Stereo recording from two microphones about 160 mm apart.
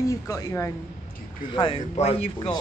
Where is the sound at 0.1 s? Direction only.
20° left (ahead or behind).